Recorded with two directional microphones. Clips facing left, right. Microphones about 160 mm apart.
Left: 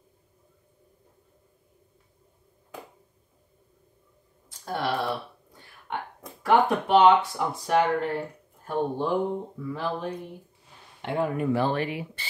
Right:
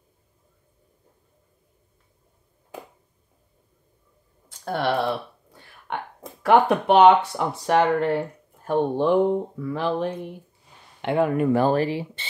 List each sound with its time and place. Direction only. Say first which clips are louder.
4.5 s a sound: right 4 dB; 65° right (ahead or behind)
6.4 s speech: right 4 dB; 70° right (ahead or behind)
11.5 s speech: right 6 dB; 40° right (ahead or behind)